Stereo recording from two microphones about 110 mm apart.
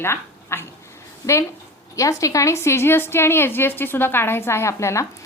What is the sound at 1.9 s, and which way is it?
A woman's voice, 30° left (ahead or behind).